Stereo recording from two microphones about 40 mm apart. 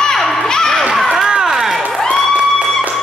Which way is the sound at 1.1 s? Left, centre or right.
Centre.